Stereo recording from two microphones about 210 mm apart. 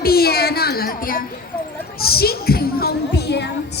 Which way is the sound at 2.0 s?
45° left (ahead or behind).